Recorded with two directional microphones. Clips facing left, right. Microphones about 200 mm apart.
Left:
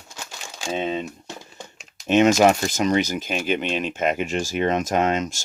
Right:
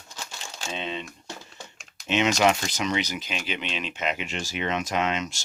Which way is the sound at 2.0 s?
50° left (ahead or behind).